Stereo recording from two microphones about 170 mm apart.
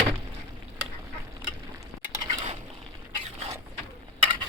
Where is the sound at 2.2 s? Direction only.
40° right (ahead or behind).